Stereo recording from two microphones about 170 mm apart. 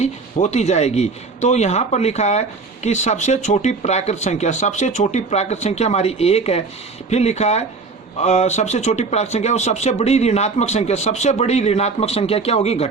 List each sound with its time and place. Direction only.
0.0 s speech: 40° left (ahead or behind)